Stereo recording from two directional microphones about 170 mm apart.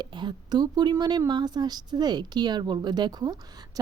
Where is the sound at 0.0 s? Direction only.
25° right (ahead or behind).